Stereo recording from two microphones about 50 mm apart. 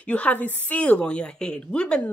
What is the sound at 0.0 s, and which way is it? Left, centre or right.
A woman's voice, left.